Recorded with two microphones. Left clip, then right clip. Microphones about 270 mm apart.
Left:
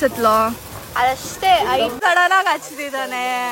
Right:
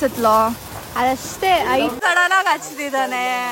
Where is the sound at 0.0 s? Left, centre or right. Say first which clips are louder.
Even; centre.